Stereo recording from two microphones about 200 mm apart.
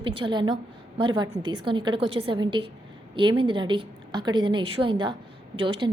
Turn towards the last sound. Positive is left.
turn(degrees=-25)  # may be behind; listen again after turning